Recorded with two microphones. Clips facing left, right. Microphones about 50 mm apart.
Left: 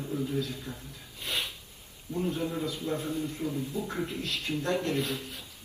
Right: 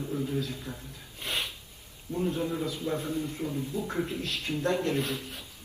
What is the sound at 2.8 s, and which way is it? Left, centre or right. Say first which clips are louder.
Speech: right 1 dB; right.